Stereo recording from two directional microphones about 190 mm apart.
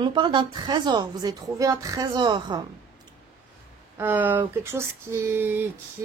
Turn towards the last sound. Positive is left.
turn(degrees=-10)  # may be behind; listen again after turning